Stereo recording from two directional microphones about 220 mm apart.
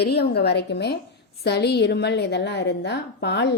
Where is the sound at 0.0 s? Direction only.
45° left (ahead or behind).